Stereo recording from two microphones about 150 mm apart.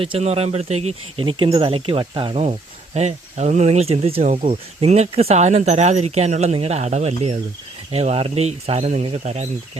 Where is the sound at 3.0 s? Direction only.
50° right (ahead or behind).